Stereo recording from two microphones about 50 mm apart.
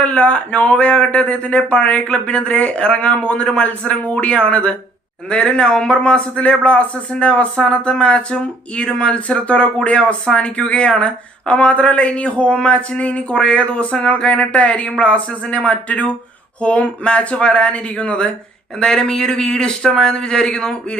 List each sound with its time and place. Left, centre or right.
0.0 s speech: left